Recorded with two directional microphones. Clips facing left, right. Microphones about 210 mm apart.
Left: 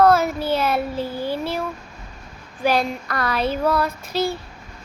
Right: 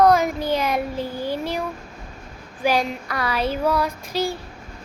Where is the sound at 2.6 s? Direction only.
10° right (ahead or behind).